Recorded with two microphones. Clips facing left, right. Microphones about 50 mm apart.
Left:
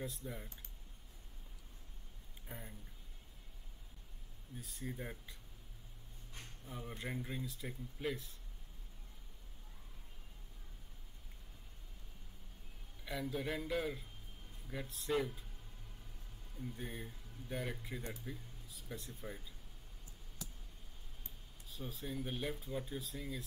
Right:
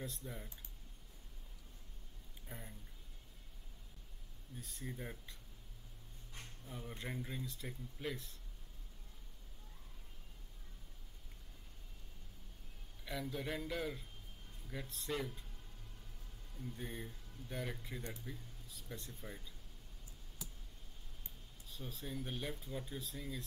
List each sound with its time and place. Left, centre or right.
0.0 s speech: centre
2.4 s speech: centre
4.6 s speech: centre
6.6 s speech: centre
13.0 s speech: centre
16.5 s speech: centre
21.6 s speech: centre